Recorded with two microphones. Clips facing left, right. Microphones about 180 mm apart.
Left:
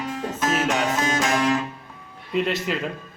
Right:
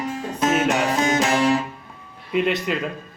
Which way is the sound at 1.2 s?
30° right (ahead or behind).